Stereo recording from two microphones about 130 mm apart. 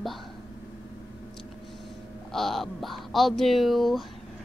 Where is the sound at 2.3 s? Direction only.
Centre (ahead or behind).